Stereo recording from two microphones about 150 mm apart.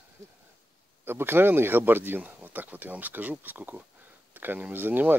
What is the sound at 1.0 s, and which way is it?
Speech, 15° right (ahead or behind).